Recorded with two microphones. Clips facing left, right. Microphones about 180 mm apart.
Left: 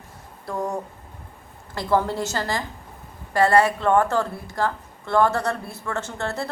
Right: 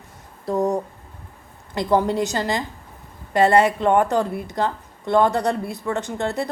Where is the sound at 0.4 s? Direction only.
20° right (ahead or behind).